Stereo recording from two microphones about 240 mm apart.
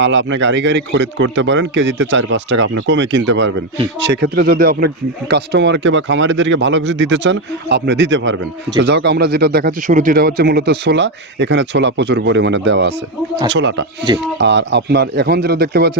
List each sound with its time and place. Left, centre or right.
0.0 s speech: right